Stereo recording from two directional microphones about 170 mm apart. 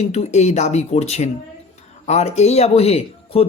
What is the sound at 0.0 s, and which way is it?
Speech, 40° left (ahead or behind).